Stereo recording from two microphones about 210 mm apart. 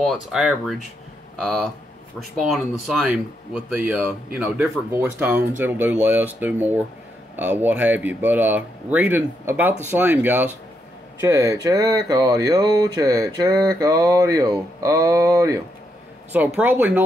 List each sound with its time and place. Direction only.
0.0 s speech: centre (ahead or behind)
2.9 s speech: 5° right (ahead or behind)